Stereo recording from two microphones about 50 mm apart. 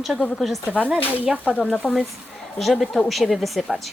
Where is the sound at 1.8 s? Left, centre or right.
Centre.